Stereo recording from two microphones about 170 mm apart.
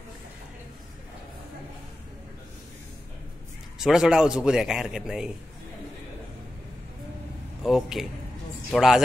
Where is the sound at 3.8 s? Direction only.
5° right (ahead or behind).